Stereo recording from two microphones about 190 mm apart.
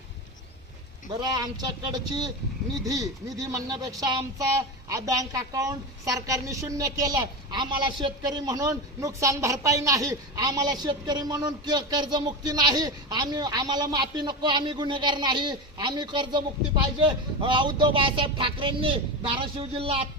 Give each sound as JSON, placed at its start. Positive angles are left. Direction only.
{"t": 1.2, "sound": "a man's voice", "side_deg": -20}